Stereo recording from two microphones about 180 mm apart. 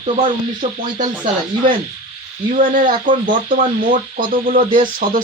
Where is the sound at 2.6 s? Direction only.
50° right (ahead or behind).